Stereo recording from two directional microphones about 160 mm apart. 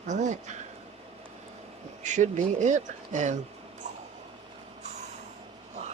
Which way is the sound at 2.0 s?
50° right (ahead or behind).